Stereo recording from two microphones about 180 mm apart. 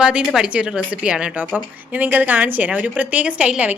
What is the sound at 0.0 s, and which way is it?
A woman's voice, 5° right (ahead or behind).